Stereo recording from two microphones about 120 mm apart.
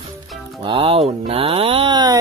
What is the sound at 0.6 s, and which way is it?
Speech, 50° right (ahead or behind).